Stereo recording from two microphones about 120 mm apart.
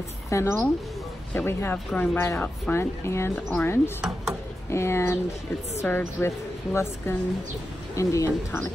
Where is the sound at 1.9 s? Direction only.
5° left (ahead or behind).